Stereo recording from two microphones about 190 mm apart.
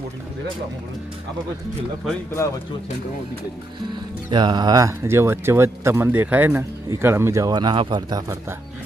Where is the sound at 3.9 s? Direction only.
25° right (ahead or behind).